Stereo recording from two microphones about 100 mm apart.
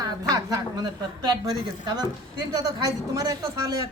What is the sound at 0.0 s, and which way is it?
Speech, 40° right (ahead or behind).